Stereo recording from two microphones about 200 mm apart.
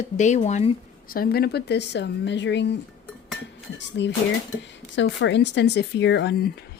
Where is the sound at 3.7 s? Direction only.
60° left (ahead or behind).